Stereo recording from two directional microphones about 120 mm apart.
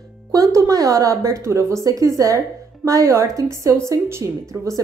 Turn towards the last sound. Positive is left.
turn(degrees=-25)  # may be behind; listen again after turning